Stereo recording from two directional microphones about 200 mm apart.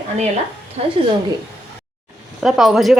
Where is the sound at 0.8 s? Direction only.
30° right (ahead or behind).